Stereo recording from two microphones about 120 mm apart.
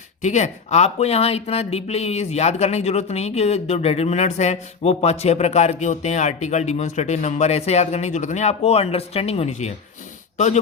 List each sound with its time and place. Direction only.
0.2 s speech: 75° left (ahead or behind)